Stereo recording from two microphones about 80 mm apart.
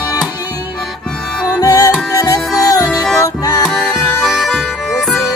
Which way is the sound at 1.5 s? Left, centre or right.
Left.